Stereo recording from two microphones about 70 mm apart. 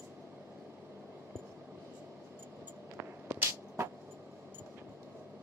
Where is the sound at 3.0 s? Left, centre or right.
Right.